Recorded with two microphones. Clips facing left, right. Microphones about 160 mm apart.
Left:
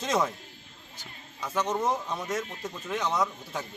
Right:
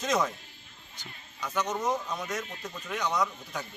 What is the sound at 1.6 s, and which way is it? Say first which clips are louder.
Speech: left 2 dB; 30° left (ahead or behind).